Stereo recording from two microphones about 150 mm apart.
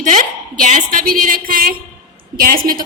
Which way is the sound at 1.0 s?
70° right (ahead or behind).